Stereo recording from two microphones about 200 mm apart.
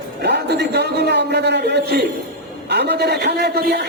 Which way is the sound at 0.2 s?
55° right (ahead or behind).